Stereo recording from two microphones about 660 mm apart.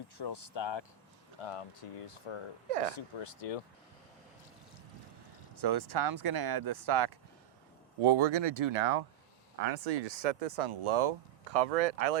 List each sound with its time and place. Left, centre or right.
0.2 s speech: left
1.4 s speech: left
5.5 s speech: right
9.6 s speech: right
11.5 s speech: right